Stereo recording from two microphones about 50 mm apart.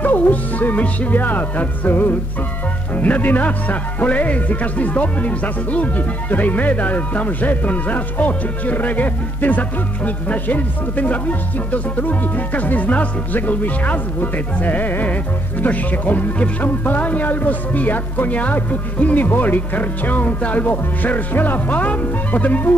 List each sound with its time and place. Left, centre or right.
0.0 s speech: left